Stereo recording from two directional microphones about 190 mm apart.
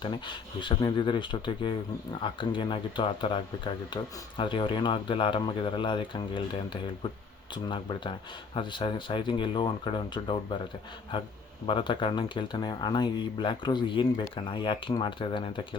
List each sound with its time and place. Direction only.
0.0 s speech: 25° left (ahead or behind)
7.5 s speech: 25° left (ahead or behind)
11.6 s speech: 25° left (ahead or behind)